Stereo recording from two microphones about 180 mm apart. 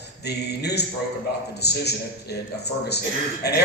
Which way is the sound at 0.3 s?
65° left (ahead or behind).